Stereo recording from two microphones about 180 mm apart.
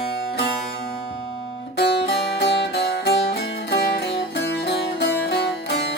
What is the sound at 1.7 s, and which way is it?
Music, 65° left (ahead or behind).